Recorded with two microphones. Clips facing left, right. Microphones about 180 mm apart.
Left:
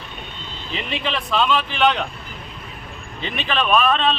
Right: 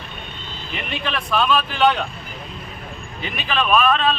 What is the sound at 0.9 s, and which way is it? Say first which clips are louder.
Speech: even; 25° left (ahead or behind).